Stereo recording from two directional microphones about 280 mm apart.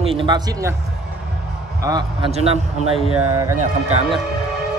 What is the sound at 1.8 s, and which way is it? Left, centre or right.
Speech, centre.